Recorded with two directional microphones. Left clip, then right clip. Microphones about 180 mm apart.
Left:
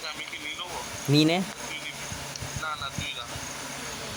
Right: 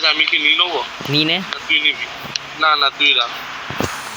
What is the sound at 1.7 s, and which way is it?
Speech, 40° right (ahead or behind).